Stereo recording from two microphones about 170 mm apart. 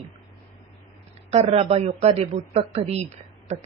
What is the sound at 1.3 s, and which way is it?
Speech, 35° right (ahead or behind).